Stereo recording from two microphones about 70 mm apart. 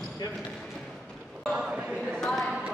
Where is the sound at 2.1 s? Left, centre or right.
Centre.